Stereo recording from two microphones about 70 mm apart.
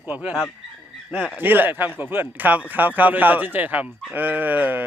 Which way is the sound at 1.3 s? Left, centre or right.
Right.